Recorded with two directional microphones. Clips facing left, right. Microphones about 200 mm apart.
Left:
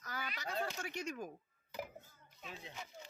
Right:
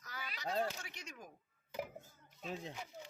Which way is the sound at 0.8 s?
55° left (ahead or behind).